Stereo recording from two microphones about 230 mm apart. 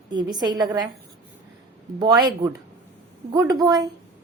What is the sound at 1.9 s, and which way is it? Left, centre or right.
A woman's voice, centre.